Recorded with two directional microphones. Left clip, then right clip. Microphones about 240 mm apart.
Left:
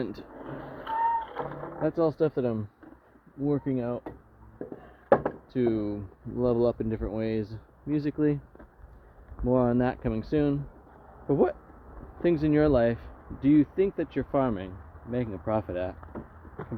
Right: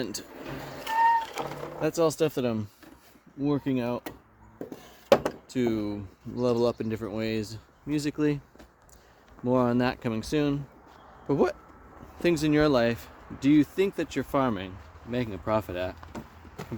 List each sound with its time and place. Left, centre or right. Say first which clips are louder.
0.0 s speech: right 1 dB; centre
1.8 s speech: right 1 dB; centre
5.0 s a sound: right 1 dB; right
5.5 s speech: left 2 dB; centre
9.4 s speech: even; centre